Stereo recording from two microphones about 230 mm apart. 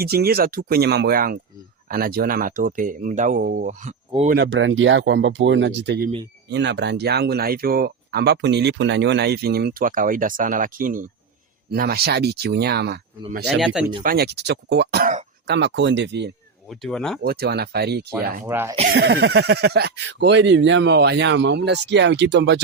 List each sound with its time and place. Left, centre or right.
0.0 s speech: right
4.3 s speech: right
13.6 s speech: centre
14.0 s speech: right
16.6 s speech: centre
17.2 s speech: right
18.4 s speech: centre
18.8 s speech: right